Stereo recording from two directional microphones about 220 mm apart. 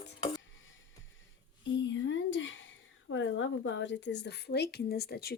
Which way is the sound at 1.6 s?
55° left (ahead or behind).